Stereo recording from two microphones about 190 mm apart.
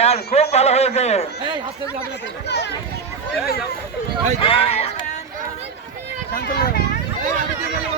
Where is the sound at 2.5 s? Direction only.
65° left (ahead or behind).